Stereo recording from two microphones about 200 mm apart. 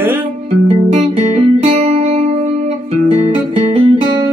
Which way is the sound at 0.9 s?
30° right (ahead or behind).